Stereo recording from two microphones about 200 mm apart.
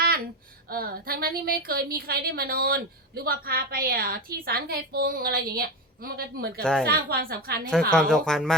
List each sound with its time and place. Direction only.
0.7 s a woman's voice: 50° right (ahead or behind)
6.6 s speech: 5° left (ahead or behind)
6.8 s a woman's voice: 50° right (ahead or behind)
7.9 s speech: 5° left (ahead or behind)